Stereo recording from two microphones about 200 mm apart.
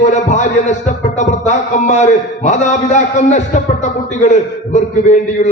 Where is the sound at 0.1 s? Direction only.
35° left (ahead or behind).